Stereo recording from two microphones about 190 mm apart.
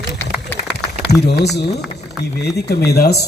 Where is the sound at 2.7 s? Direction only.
55° left (ahead or behind).